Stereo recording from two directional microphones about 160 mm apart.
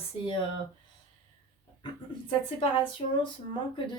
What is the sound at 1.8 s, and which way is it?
Speech, 30° left (ahead or behind).